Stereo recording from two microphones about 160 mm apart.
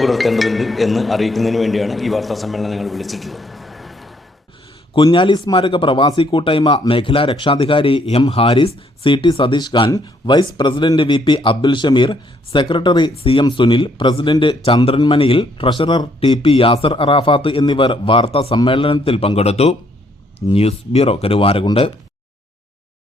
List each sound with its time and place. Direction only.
0.0 s a man's voice: centre (ahead or behind)
5.0 s speech: 30° left (ahead or behind)